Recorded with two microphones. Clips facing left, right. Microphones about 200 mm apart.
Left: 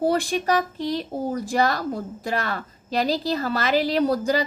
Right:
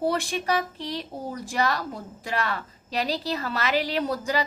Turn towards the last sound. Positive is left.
turn(degrees=35)  # may be behind; listen again after turning